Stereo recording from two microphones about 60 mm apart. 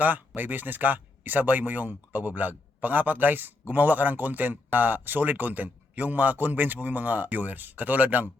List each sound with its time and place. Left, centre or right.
0.0 s speech: right